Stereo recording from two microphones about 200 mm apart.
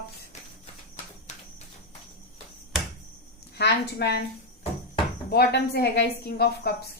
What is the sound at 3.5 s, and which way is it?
Speech, 55° left (ahead or behind).